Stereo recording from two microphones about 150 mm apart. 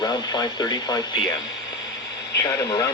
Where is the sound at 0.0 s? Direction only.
30° left (ahead or behind).